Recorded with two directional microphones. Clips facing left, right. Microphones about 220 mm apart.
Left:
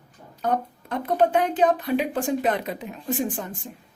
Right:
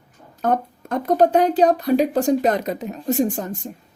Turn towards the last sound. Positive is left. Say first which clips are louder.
# right 6 dB
turn(degrees=-40)  # may be behind; listen again after turning